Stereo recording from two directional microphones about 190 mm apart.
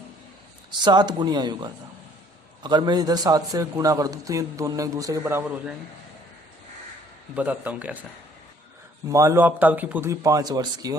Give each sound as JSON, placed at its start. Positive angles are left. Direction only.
{"t": 0.8, "sound": "a man's voice", "side_deg": -20}
{"t": 7.3, "sound": "a man's voice", "side_deg": -5}
{"t": 9.0, "sound": "a man's voice", "side_deg": -15}